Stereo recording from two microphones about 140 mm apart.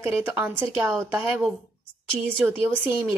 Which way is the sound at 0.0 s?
15° right (ahead or behind).